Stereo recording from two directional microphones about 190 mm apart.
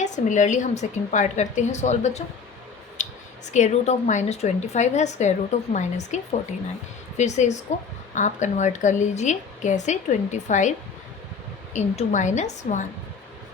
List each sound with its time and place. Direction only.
0.0 s a woman's voice: 40° left (ahead or behind)
3.0 s a sound: 40° left (ahead or behind)
3.5 s a woman's voice: 35° left (ahead or behind)
7.2 s a woman's voice: 35° left (ahead or behind)